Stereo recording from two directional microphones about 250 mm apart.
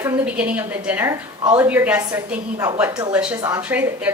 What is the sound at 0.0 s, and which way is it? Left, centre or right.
A woman's voice, centre.